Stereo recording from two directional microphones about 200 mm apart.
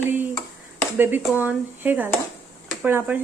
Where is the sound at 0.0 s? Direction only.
10° right (ahead or behind).